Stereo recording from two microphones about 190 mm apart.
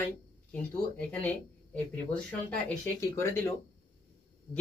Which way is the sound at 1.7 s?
5° left (ahead or behind).